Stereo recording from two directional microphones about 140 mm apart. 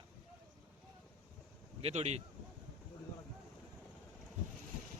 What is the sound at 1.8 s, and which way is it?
Speech, 50° right (ahead or behind).